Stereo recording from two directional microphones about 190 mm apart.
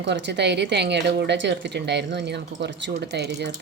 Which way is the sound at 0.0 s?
65° right (ahead or behind).